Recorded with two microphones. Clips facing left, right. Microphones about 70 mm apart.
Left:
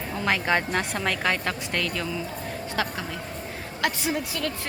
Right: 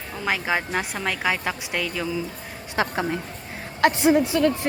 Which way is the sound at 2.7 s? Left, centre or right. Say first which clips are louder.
Right 7 dB; right.